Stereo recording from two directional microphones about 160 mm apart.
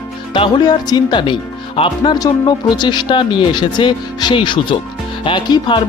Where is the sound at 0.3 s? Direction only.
30° left (ahead or behind).